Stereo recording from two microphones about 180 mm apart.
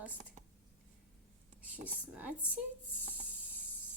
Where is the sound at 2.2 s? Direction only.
10° right (ahead or behind).